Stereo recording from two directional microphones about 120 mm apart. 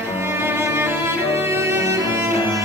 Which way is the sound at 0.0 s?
20° right (ahead or behind).